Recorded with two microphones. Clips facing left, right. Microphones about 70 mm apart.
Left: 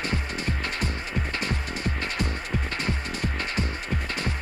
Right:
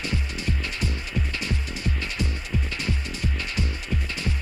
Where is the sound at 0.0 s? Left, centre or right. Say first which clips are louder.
Left 1 dB; left.